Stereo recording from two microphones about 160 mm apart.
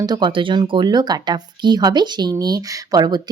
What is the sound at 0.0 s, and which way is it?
Speech, 25° right (ahead or behind).